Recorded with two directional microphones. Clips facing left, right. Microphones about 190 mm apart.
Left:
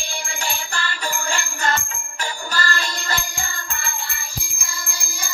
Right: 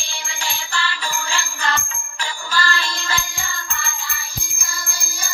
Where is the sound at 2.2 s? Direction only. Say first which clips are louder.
Right 1 dB; 45° left (ahead or behind).